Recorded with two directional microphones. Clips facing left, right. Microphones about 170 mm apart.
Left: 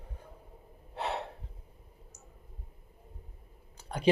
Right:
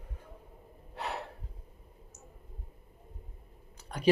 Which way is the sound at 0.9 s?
25° left (ahead or behind).